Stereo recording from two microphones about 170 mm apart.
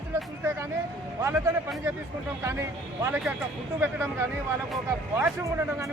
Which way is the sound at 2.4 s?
15° right (ahead or behind).